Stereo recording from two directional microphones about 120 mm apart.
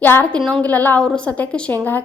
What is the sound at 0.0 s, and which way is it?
A woman's voice, 15° left (ahead or behind).